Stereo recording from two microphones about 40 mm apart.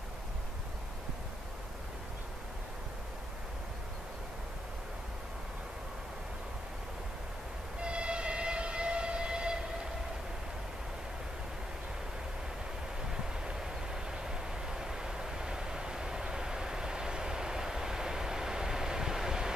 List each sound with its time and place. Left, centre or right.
7.8 s train: right
13.1 s vehicle: centre